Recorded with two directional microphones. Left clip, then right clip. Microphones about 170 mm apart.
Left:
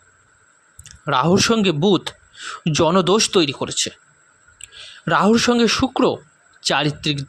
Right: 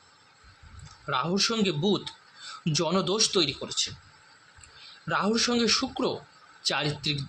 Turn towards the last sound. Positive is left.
turn(degrees=55)  # may be behind; listen again after turning